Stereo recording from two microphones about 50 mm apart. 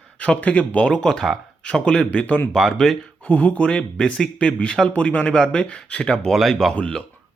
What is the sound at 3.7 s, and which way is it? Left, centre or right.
Speech, centre.